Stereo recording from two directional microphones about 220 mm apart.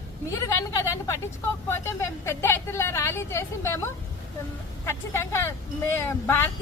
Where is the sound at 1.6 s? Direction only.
10° left (ahead or behind).